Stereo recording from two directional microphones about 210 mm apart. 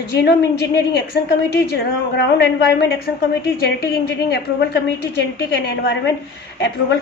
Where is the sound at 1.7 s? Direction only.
50° left (ahead or behind).